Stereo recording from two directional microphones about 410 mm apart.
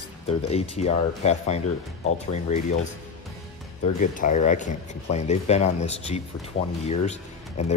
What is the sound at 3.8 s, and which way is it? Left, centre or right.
Speech, centre.